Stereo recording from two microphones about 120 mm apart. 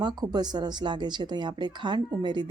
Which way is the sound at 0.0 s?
35° right (ahead or behind).